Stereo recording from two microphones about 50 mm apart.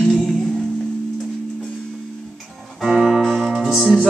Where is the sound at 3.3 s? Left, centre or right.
Centre.